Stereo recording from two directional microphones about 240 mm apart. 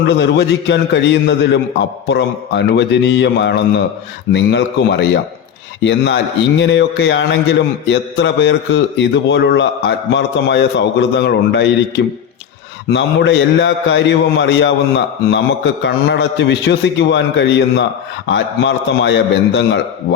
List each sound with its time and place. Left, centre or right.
0.0 s a man's voice: left
12.9 s a man's voice: left
15.8 s a man's voice: left